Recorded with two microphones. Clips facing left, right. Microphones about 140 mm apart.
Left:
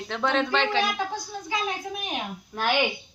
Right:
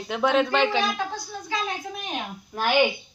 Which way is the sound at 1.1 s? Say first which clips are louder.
Even; 15° left (ahead or behind).